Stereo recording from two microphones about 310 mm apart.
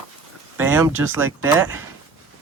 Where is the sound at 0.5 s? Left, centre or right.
Centre.